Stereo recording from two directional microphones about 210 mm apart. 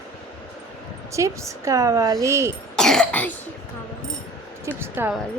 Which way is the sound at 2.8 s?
5° left (ahead or behind).